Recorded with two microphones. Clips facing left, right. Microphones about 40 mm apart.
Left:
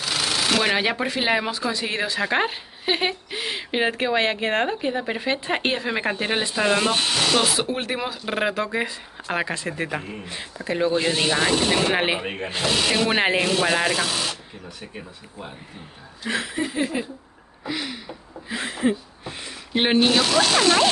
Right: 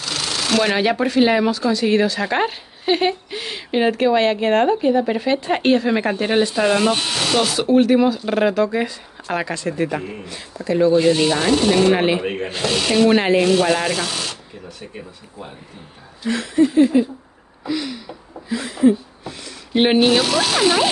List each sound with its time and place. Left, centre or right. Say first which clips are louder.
0.0 s speech: even; centre
10.2 s speech: right 4 dB; left
12.2 s speech: right 4 dB; centre
13.5 s speech: right 4 dB; centre
16.3 s speech: right 9 dB; centre
17.6 s a sound: right 5 dB; centre
19.7 s speech: right 4 dB; centre